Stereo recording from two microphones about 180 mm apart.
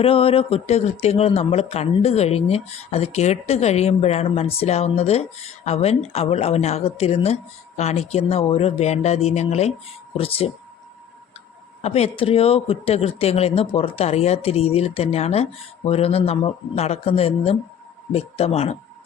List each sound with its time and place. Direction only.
0.0 s a man's voice: 30° left (ahead or behind)
11.8 s a man's voice: 35° left (ahead or behind)